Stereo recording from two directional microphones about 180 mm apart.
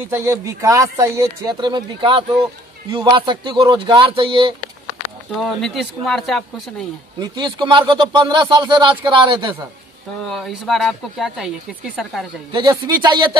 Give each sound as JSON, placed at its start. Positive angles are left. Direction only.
{"t": 0.1, "sound": "speech", "side_deg": -15}
{"t": 5.4, "sound": "speech", "side_deg": 0}
{"t": 7.2, "sound": "speech", "side_deg": -25}
{"t": 10.2, "sound": "speech", "side_deg": 0}
{"t": 12.5, "sound": "speech", "side_deg": -25}